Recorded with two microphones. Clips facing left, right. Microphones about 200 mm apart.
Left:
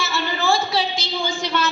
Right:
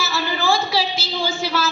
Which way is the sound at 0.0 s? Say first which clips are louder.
Right 1 dB; 5° right (ahead or behind).